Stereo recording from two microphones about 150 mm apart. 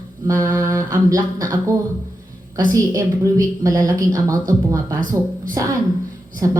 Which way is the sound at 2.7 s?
25° right (ahead or behind).